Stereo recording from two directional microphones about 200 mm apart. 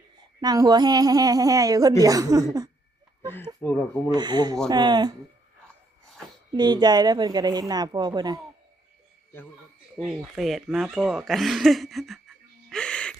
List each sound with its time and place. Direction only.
0.4 s a woman's voice: 20° right (ahead or behind)
3.3 s speech: 10° left (ahead or behind)
4.1 s a woman's voice: 20° right (ahead or behind)
6.5 s a woman's voice: 20° right (ahead or behind)
10.0 s speech: 5° right (ahead or behind)
12.7 s gasp: 5° left (ahead or behind)